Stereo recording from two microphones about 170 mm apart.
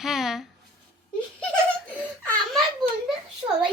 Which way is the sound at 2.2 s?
10° left (ahead or behind).